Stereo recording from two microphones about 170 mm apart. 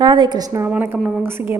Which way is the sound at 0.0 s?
25° right (ahead or behind).